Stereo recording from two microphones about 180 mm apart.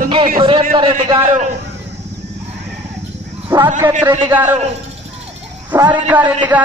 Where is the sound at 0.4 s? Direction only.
25° right (ahead or behind).